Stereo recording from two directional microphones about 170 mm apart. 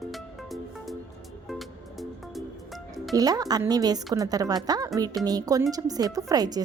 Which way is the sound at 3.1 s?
20° right (ahead or behind).